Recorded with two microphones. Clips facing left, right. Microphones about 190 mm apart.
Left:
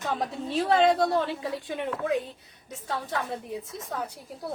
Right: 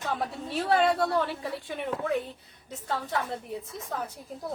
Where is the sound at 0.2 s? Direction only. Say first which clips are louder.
Left 3 dB; 20° left (ahead or behind).